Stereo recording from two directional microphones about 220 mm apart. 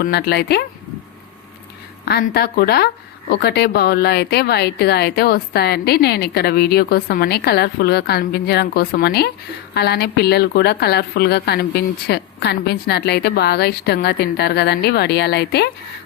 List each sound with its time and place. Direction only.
0.0 s speech: 45° left (ahead or behind)
2.0 s speech: 45° left (ahead or behind)